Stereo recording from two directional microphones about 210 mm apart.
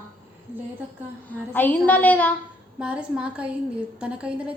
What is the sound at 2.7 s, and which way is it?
A woman's voice, 5° right (ahead or behind).